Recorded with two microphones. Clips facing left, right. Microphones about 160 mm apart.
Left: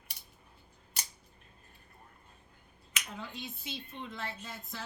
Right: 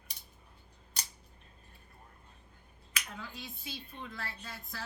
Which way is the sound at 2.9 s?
25° left (ahead or behind).